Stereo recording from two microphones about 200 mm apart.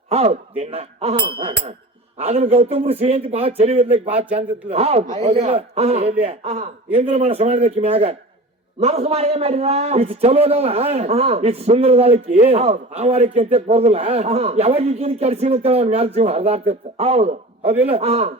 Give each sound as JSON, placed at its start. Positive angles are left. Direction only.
{"t": 0.1, "sound": "a man's voice", "side_deg": -30}